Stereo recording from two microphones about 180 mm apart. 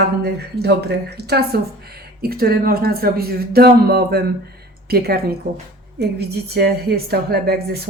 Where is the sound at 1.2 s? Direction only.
65° right (ahead or behind).